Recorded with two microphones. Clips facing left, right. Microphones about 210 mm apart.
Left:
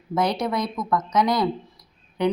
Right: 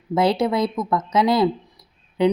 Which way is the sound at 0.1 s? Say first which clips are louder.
Right 5 dB; 25° right (ahead or behind).